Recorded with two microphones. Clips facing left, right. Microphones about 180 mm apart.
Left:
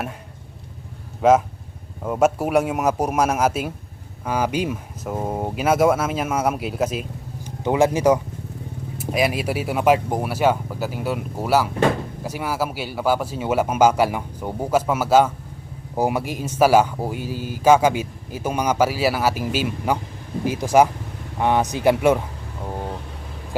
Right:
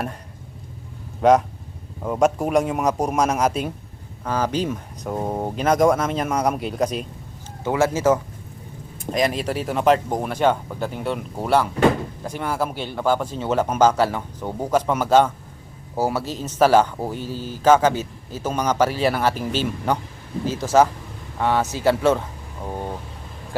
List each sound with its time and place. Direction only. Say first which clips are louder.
1.2 s speech: even; centre (ahead or behind)
7.6 s speech: left 2 dB; 15° left (ahead or behind)